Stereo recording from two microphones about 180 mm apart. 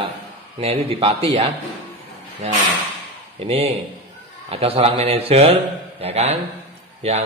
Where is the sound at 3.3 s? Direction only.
35° right (ahead or behind).